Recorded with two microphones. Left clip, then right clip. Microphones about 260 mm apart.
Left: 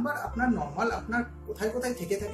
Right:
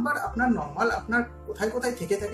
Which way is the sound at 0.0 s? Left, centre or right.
Centre.